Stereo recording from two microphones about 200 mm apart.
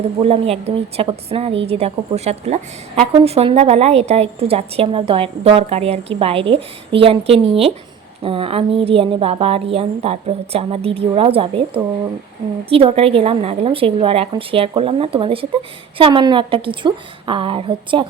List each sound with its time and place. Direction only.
0.2 s a woman's voice: 30° right (ahead or behind)